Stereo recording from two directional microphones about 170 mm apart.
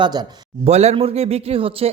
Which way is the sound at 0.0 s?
25° right (ahead or behind).